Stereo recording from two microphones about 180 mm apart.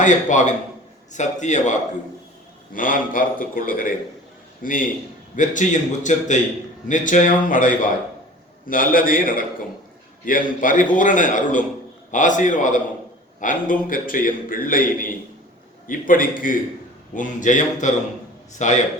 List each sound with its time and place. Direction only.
0.0 s a man's voice: 45° left (ahead or behind)